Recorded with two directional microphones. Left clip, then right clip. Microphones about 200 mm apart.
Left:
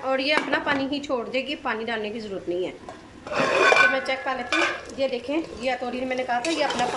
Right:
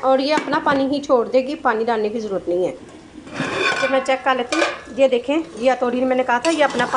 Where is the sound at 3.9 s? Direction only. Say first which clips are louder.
Right 8 dB; 10° right (ahead or behind).